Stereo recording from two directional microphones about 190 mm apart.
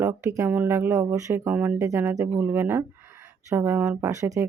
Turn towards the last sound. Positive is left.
turn(degrees=-15)  # may be behind; listen again after turning